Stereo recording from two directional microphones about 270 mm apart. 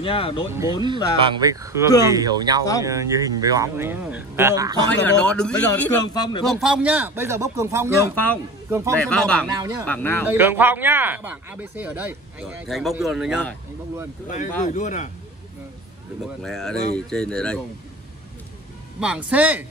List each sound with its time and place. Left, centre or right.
0.0 s speech: centre
1.1 s speech: centre
5.0 s a man's voice: centre
6.4 s speech: centre
8.1 s speech: centre
8.6 s a man's voice: centre
8.9 s speech: centre
9.5 s speech: centre
9.8 s a man's voice: centre
10.2 s speech: centre
14.6 s speech: left
16.4 s speech: centre
18.9 s speech: centre